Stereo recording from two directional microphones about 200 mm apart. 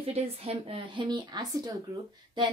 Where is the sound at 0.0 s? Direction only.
30° right (ahead or behind).